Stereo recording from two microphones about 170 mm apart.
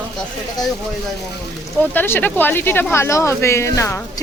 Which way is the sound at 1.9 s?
10° left (ahead or behind).